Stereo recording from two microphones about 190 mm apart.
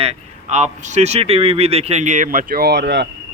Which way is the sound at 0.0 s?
35° right (ahead or behind).